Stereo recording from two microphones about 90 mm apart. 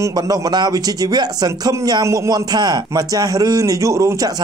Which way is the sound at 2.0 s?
35° right (ahead or behind).